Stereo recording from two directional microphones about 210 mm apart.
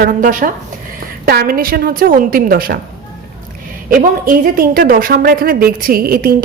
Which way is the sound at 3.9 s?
40° right (ahead or behind).